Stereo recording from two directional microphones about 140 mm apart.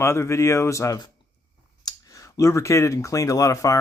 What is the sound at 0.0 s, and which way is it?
Speech, 20° left (ahead or behind).